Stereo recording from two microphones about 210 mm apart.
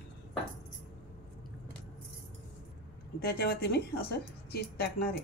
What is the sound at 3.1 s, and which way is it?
A woman's voice, 50° left (ahead or behind).